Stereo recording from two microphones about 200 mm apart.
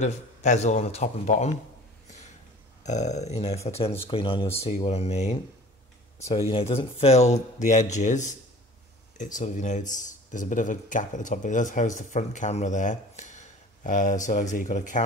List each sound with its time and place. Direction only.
0.0 s speech: 35° left (ahead or behind)
2.8 s speech: 35° left (ahead or behind)
6.5 s speech: 25° left (ahead or behind)